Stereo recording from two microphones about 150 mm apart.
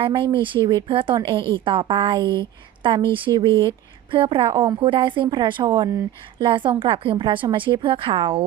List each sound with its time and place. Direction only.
0.0 s a woman's voice: 35° right (ahead or behind)